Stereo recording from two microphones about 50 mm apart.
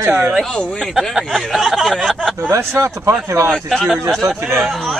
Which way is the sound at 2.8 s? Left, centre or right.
Right.